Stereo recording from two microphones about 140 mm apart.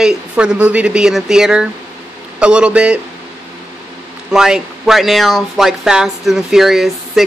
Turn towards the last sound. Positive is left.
turn(degrees=0)  # may be behind; listen again after turning